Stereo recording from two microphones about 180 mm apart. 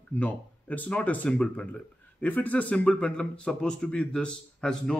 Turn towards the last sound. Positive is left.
turn(degrees=5)  # may be behind; listen again after turning